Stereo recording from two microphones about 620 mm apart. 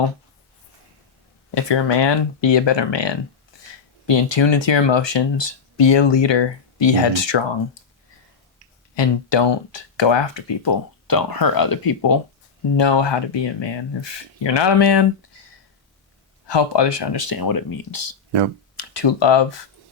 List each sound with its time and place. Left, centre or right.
1.5 s speech: left
9.0 s speech: left
16.5 s speech: left